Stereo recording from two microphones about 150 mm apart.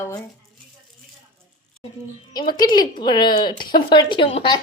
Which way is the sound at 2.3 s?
30° left (ahead or behind).